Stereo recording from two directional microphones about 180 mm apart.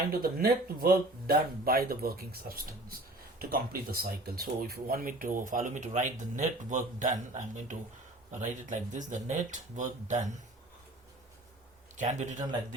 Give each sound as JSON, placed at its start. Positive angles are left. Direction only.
{"t": 0.1, "sound": "speech", "side_deg": -55}
{"t": 11.9, "sound": "speech", "side_deg": -45}